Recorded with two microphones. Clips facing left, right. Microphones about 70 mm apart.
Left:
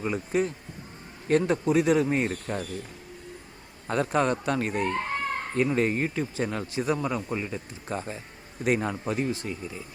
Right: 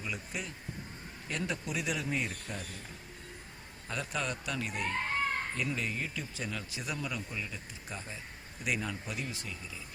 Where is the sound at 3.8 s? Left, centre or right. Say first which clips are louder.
Left 12 dB; left.